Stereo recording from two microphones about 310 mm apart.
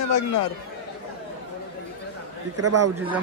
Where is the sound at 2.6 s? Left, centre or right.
Right.